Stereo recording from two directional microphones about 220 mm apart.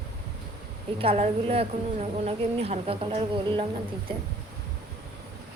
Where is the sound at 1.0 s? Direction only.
25° right (ahead or behind).